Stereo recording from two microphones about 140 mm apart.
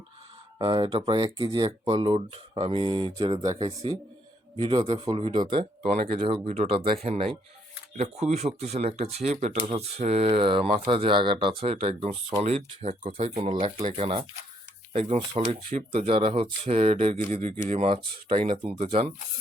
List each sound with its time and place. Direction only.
0.6 s speech: 35° right (ahead or behind)
4.6 s speech: 40° right (ahead or behind)
15.4 s speech: 50° right (ahead or behind)
18.3 s speech: 40° right (ahead or behind)